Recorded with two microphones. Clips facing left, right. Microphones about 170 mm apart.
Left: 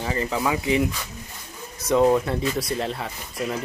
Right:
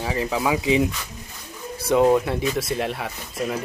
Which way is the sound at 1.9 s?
5° right (ahead or behind).